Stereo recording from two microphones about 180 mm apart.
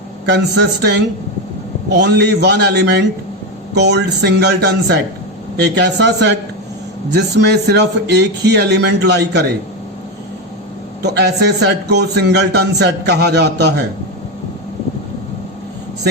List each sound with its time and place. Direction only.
0.3 s a man's voice: 65° right (ahead or behind)
11.0 s a man's voice: 65° right (ahead or behind)